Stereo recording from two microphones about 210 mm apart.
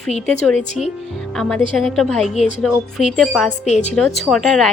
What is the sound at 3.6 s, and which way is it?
Speech, 35° left (ahead or behind).